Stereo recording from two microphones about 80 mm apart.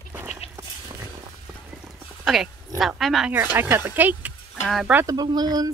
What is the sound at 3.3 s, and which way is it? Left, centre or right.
A woman's voice, right.